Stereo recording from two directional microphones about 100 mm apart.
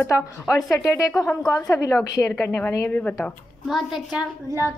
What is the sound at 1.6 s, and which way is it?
Speech, 35° left (ahead or behind).